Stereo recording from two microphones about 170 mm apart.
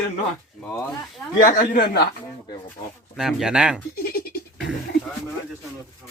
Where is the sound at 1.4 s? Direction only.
50° left (ahead or behind); by 2.1 s 70° left (ahead or behind).